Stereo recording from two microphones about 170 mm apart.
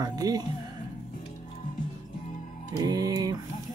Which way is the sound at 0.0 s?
20° right (ahead or behind).